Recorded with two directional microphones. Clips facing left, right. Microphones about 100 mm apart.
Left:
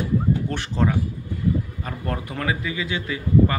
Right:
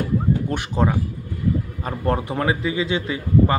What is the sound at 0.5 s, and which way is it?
Speech, 15° right (ahead or behind).